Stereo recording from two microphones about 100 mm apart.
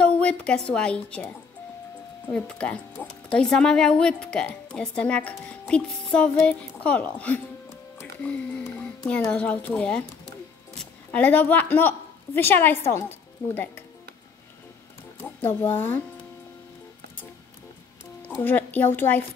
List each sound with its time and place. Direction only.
0.0 s a woman's voice: 10° left (ahead or behind)
11.1 s speech: 15° left (ahead or behind)
15.2 s speech: 20° left (ahead or behind)
18.3 s a woman's voice: 20° left (ahead or behind)